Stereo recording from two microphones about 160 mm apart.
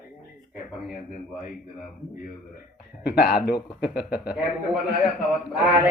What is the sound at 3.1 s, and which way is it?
A man's voice, 80° left.